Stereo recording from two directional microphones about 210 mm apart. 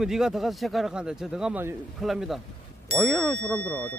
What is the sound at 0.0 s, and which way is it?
Speech, centre (ahead or behind).